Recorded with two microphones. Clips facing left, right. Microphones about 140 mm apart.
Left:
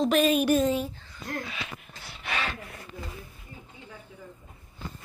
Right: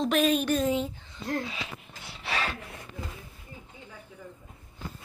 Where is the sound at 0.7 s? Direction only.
20° right (ahead or behind).